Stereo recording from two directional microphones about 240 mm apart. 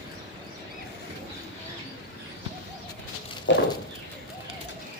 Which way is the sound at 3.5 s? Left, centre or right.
Left.